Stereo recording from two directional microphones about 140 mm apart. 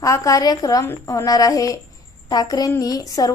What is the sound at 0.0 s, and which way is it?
A woman's voice, 25° left (ahead or behind).